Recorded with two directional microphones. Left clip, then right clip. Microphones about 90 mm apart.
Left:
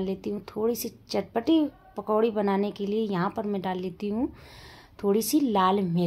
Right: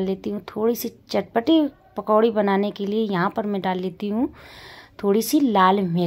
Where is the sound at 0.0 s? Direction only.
30° right (ahead or behind).